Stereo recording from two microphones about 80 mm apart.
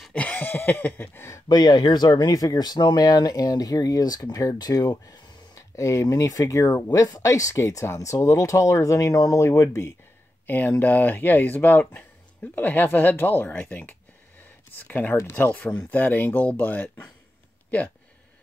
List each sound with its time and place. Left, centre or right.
0.1 s a sound: centre
1.5 s speech: left
10.4 s speech: left
13.5 s speech: centre